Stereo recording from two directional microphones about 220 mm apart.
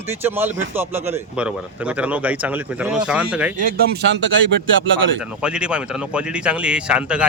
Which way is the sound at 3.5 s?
40° right (ahead or behind).